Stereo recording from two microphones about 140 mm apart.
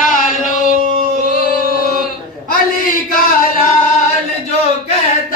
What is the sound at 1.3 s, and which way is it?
Music, 90° left.